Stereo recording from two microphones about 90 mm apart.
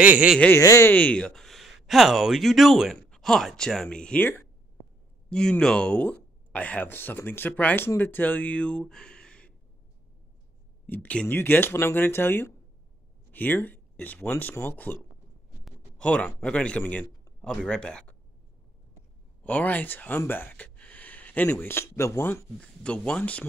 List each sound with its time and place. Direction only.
0.0 s speech: 15° right (ahead or behind)
0.6 s speech: 40° left (ahead or behind)
0.8 s speech: 15° left (ahead or behind)
10.9 s speech: 15° left (ahead or behind)
16.0 s speech: 15° left (ahead or behind)
19.4 s speech: 20° left (ahead or behind)
22.6 s speech: 10° left (ahead or behind)